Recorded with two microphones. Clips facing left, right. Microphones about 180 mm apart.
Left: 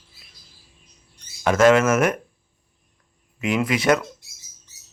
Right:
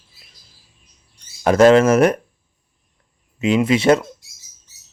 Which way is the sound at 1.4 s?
35° right (ahead or behind).